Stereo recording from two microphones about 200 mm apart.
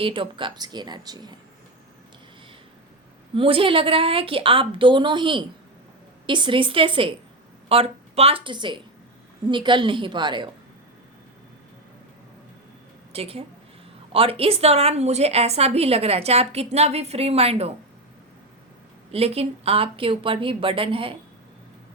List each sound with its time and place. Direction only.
0.0 s a woman's voice: 25° right (ahead or behind)
3.3 s a woman's voice: 25° right (ahead or behind)
13.1 s a woman's voice: 30° right (ahead or behind)
19.1 s a woman's voice: 30° right (ahead or behind)